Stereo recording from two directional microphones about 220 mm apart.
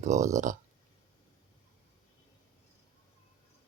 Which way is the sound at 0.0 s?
30° right (ahead or behind).